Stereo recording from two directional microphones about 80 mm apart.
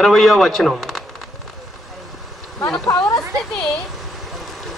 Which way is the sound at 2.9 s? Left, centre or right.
Left.